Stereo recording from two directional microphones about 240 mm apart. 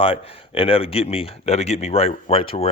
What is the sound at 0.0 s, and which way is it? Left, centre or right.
Speech, left.